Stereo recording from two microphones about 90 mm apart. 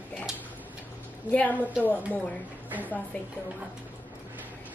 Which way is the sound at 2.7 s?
20° right (ahead or behind).